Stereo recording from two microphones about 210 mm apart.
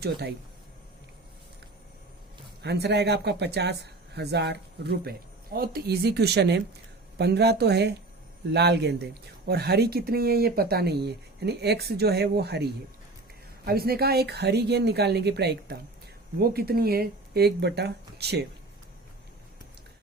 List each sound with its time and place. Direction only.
0.0 s speech: 50° right (ahead or behind)
2.6 s speech: 50° right (ahead or behind)